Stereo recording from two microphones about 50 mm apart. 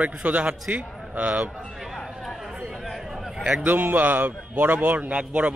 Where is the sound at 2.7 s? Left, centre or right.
Centre.